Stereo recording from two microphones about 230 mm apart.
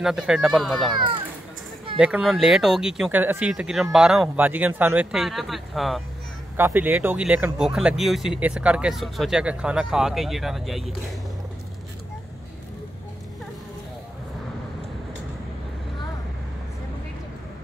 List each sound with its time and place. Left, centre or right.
0.0 s speech: centre
0.9 s a child's voice: right
2.0 s speech: centre